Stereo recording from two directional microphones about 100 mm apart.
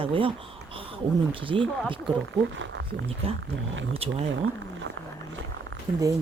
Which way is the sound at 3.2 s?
70° right (ahead or behind).